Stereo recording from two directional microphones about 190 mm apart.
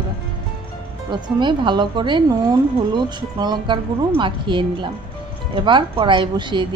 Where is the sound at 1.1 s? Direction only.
25° right (ahead or behind).